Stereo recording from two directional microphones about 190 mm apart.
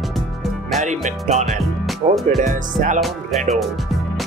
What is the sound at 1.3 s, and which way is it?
Speech, 35° right (ahead or behind).